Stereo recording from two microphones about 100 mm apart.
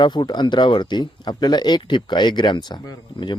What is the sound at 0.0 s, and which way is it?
Speech, 50° left (ahead or behind).